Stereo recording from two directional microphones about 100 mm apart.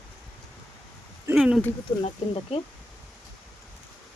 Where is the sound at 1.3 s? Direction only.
5° right (ahead or behind).